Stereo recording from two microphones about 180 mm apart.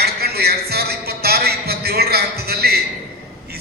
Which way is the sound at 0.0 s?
60° right (ahead or behind).